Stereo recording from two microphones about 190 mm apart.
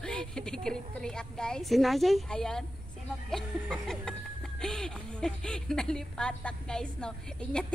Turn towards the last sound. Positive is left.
turn(degrees=5)  # may be behind; listen again after turning